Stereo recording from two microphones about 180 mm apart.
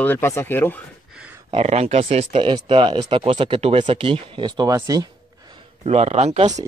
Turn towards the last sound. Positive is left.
turn(degrees=-35)  # may be behind; listen again after turning